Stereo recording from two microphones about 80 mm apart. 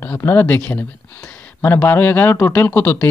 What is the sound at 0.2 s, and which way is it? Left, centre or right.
Speech, left.